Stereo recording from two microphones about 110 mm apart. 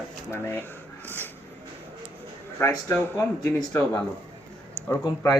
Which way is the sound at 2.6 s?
25° left (ahead or behind).